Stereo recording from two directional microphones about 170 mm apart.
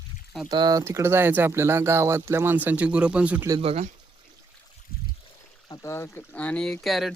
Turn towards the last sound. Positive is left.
turn(degrees=0)  # may be behind; listen again after turning